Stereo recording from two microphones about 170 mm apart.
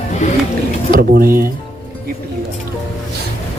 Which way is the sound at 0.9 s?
60° right (ahead or behind).